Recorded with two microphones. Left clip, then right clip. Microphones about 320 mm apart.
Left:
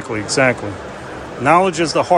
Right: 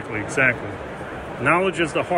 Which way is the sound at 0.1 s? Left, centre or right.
Left.